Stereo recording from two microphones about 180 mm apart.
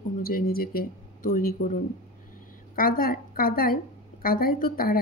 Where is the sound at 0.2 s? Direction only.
55° left (ahead or behind).